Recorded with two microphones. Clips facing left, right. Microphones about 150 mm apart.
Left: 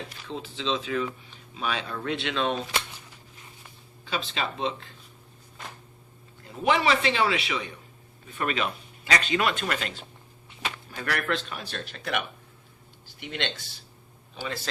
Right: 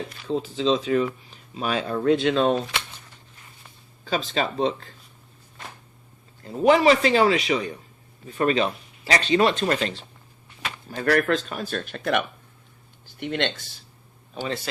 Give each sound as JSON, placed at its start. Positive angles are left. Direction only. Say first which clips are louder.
{"t": 0.3, "sound": "speech", "louder": "right 8 dB", "side_deg": -40}
{"t": 4.0, "sound": "speech", "louder": "right 6 dB", "side_deg": -40}
{"t": 6.5, "sound": "speech", "louder": "right 7 dB", "side_deg": -35}